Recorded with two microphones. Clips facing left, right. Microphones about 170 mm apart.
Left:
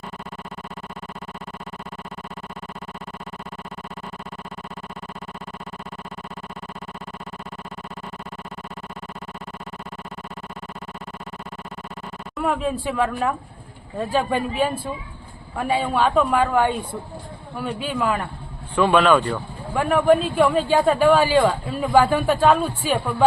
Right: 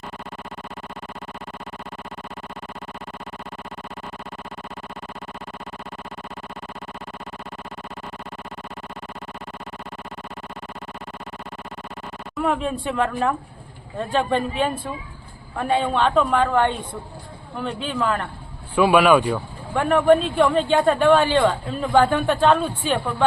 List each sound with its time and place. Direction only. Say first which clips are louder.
12.4 s a man's voice: even; 5° left (ahead or behind)
18.8 s speech: right 1 dB; 10° right (ahead or behind)
19.7 s a man's voice: right 1 dB; 5° left (ahead or behind)